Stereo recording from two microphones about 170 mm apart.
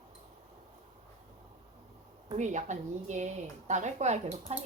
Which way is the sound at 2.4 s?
45° right (ahead or behind).